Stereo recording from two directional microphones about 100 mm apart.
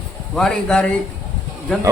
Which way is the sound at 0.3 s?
5° left (ahead or behind).